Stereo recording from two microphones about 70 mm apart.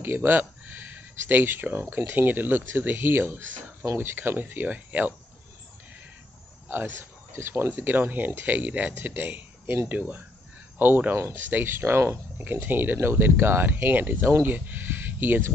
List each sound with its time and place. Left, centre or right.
0.0 s speech: right
6.7 s speech: right
12.4 s speech: right